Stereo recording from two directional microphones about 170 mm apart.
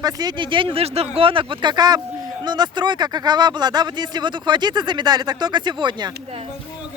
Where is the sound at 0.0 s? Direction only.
25° right (ahead or behind).